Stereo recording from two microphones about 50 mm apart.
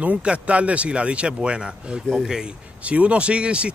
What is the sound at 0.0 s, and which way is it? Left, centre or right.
Speech, right.